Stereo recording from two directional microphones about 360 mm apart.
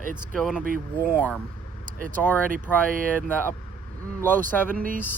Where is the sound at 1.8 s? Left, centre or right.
Right.